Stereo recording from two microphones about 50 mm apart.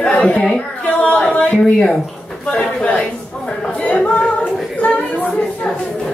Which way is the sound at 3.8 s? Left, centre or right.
Left.